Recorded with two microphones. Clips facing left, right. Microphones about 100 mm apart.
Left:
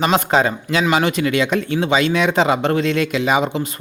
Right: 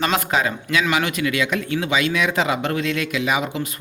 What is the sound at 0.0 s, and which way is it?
A man's voice, 30° left (ahead or behind).